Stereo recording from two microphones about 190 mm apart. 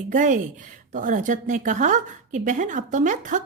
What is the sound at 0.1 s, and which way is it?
Speech, 45° right (ahead or behind).